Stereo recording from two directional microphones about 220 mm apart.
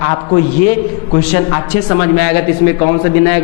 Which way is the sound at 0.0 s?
20° left (ahead or behind).